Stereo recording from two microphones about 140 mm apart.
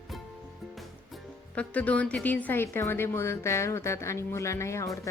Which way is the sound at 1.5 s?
10° left (ahead or behind).